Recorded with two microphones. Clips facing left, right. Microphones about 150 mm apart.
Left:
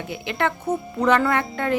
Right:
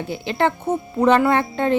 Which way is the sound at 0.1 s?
30° right (ahead or behind).